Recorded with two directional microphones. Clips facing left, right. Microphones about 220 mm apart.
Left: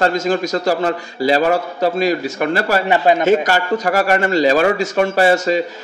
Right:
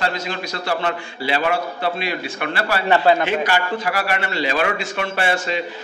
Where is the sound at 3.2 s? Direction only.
45° left (ahead or behind).